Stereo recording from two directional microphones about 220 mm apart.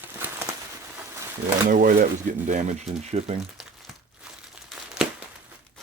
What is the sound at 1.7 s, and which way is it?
Speech, 40° right (ahead or behind).